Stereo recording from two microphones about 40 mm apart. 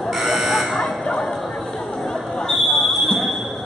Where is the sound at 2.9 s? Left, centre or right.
Centre.